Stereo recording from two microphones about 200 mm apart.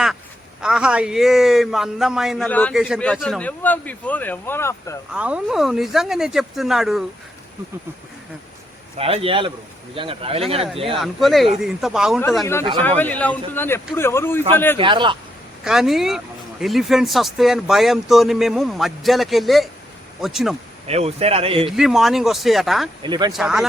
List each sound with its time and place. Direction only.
0.6 s a man's voice: 5° right (ahead or behind); by 4.9 s 10° left (ahead or behind)
5.1 s speech: 5° right (ahead or behind)
9.0 s a man's voice: 30° right (ahead or behind)
10.9 s speech: centre (ahead or behind)
12.8 s a man's voice: 10° left (ahead or behind)
14.8 s a man's voice: 25° right (ahead or behind)
15.6 s speech: centre (ahead or behind)
20.8 s speech: 30° right (ahead or behind)
21.7 s speech: centre (ahead or behind)
23.0 s a man's voice: 20° right (ahead or behind)
23.3 s speech: centre (ahead or behind)